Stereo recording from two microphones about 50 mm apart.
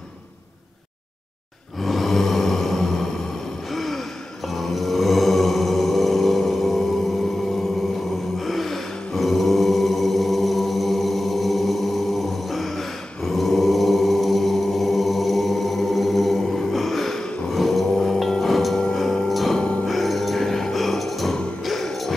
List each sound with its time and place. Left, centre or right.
1.8 s a sound: centre
3.7 s gasp: centre
4.6 s mantra: centre
8.4 s mantra: centre
17.5 s a sound: centre
18.4 s music: centre
19.6 s music: centre
19.9 s music: centre